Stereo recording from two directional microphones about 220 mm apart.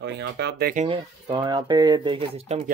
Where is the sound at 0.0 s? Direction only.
50° right (ahead or behind).